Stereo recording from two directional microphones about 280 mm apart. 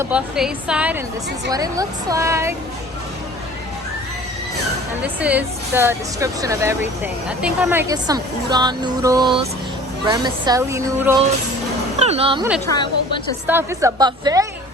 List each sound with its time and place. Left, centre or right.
0.0 s a woman's voice: centre
5.0 s a woman's voice: centre
11.9 s speech: right
12.6 s a woman's voice: centre
13.5 s a woman's voice: centre